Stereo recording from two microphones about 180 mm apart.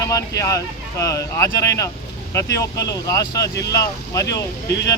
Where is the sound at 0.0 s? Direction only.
20° left (ahead or behind).